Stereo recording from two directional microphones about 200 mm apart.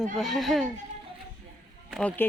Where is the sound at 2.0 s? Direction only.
5° left (ahead or behind).